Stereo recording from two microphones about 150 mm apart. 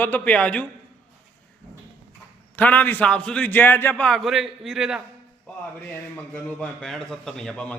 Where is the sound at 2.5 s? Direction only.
10° left (ahead or behind).